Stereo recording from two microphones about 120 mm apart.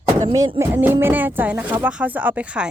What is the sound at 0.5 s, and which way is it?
Speech, 20° right (ahead or behind).